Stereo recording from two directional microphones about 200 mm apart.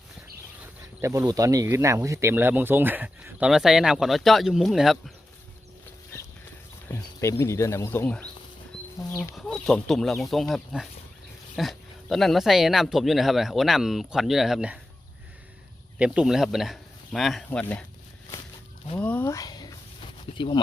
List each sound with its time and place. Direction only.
0.6 s speech: 15° right (ahead or behind)
5.8 s horse: 10° left (ahead or behind)
6.8 s speech: 10° left (ahead or behind); by 14.8 s 5° right (ahead or behind)
16.0 s speech: 5° right (ahead or behind)
18.9 s a sound: 10° left (ahead or behind); by 20.6 s 25° left (ahead or behind)